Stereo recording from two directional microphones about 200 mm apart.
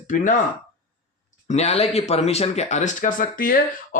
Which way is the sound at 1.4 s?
30° left (ahead or behind).